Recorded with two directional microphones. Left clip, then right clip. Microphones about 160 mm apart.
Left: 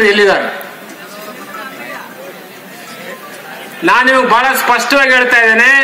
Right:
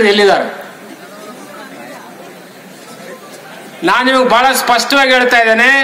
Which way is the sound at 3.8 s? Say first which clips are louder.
Left 2 dB; 65° right (ahead or behind).